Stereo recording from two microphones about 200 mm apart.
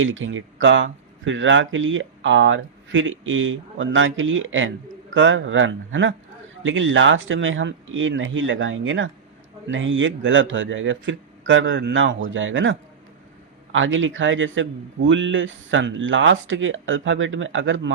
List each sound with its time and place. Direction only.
0.0 s speech: 75° right (ahead or behind)
13.7 s speech: 75° right (ahead or behind)